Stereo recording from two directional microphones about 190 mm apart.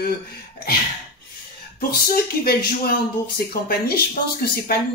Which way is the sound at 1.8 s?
55° left (ahead or behind).